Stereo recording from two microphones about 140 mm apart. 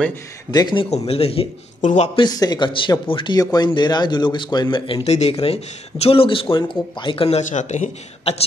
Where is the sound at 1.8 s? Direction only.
65° left (ahead or behind).